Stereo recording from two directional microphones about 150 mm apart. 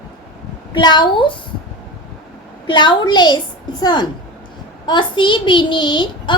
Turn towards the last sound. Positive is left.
turn(degrees=30)  # may be behind; listen again after turning